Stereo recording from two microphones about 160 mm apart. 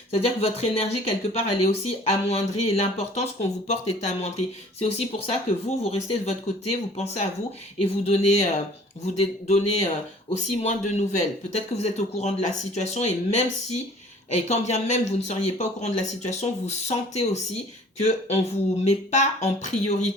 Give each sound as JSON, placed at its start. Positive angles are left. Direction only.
{"t": 0.1, "sound": "a man's voice", "side_deg": 40}